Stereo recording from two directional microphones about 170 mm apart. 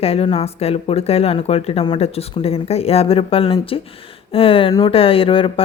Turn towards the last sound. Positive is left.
turn(degrees=30)  # may be behind; listen again after turning